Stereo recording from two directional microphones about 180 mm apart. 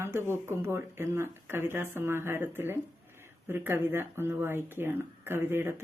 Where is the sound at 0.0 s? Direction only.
15° right (ahead or behind).